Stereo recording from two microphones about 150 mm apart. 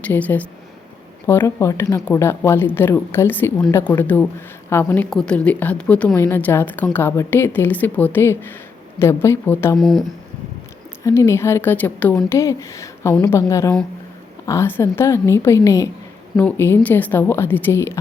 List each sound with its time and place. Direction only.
0.0 s a woman's voice: 10° left (ahead or behind)
9.7 s speech: centre (ahead or behind)
11.0 s a woman's voice: 20° left (ahead or behind)
16.3 s a woman's voice: 10° left (ahead or behind)